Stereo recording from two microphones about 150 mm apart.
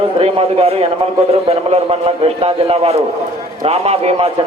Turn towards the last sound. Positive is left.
turn(degrees=-45)  # may be behind; listen again after turning